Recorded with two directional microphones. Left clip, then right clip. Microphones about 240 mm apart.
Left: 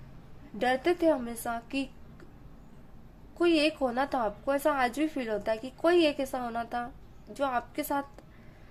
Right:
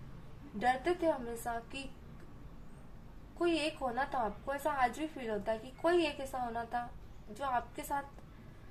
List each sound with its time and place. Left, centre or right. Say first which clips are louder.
0.6 s a woman's voice: left 5 dB; left
3.3 s a woman's voice: left 8 dB; left